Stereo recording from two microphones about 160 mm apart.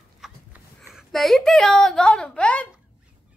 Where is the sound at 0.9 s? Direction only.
Centre (ahead or behind).